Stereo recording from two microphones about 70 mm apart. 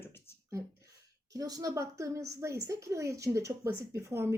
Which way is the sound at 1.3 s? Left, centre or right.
Right.